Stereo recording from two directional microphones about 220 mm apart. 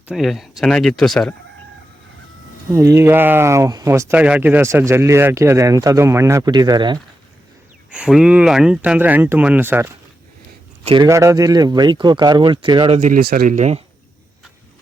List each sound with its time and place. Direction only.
0.1 s speech: centre (ahead or behind)
2.7 s speech: 15° right (ahead or behind)
7.9 s speech: 5° right (ahead or behind); by 13.0 s 20° right (ahead or behind)
13.0 s speech: 40° right (ahead or behind)